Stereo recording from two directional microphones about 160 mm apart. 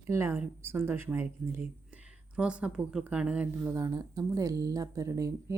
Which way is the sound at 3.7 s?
20° right (ahead or behind).